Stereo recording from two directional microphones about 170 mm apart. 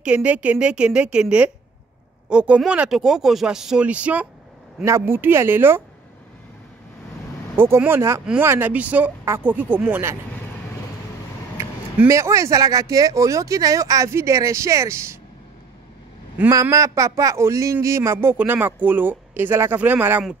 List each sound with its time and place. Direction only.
0.0 s a man's voice: 5° right (ahead or behind)
7.5 s a man's voice: 15° right (ahead or behind)
11.5 s a man's voice: 15° right (ahead or behind)
16.3 s a man's voice: 15° right (ahead or behind)